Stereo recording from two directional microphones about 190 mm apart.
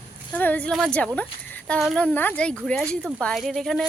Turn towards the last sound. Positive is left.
turn(degrees=0)  # may be behind; listen again after turning